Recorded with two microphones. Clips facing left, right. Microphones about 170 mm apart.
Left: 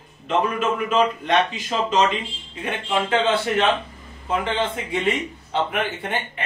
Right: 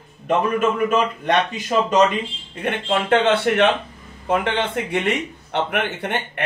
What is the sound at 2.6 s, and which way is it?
A man's voice, 65° right (ahead or behind).